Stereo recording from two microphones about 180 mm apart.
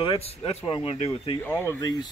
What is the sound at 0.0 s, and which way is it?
Speech, 30° left (ahead or behind).